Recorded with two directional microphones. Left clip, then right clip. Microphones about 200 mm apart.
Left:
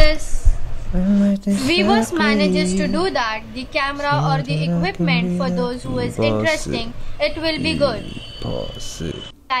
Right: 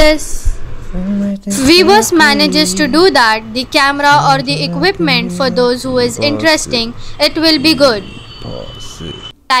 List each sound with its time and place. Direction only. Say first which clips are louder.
0.0 s a woman's voice: right 9 dB; 25° right (ahead or behind)
1.5 s a woman's voice: right 11 dB; 25° right (ahead or behind)
8.5 s speech: even; centre (ahead or behind)